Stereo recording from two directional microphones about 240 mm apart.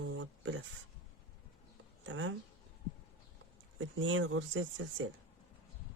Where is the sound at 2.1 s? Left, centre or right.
Right.